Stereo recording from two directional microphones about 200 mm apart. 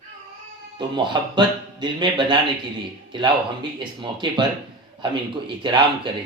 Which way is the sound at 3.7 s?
25° right (ahead or behind).